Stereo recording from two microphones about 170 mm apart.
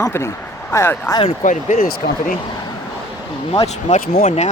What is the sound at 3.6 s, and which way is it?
Speech, 45° left (ahead or behind).